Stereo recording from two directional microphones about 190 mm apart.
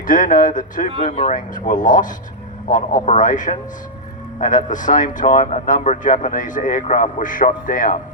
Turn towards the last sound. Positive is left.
turn(degrees=45)  # may be behind; listen again after turning